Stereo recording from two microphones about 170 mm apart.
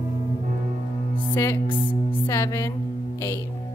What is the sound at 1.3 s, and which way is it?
Music, 15° left (ahead or behind).